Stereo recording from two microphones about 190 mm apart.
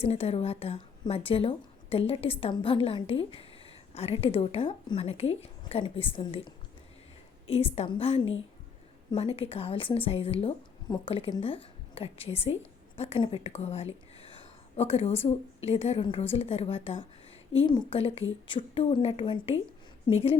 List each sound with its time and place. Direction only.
0.0 s a woman's voice: 35° left (ahead or behind)
7.5 s a woman's voice: 30° left (ahead or behind)